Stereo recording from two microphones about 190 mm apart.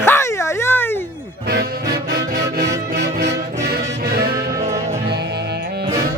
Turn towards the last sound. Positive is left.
turn(degrees=-55)  # may be behind; listen again after turning